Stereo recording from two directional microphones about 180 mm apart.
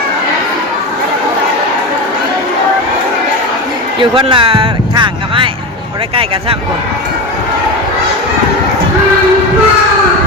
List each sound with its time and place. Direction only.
4.1 s speech: 30° right (ahead or behind)